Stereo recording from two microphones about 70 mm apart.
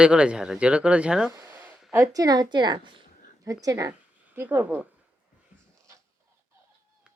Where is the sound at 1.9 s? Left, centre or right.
Right.